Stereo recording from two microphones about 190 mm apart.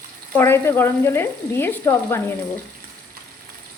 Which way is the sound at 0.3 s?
15° left (ahead or behind).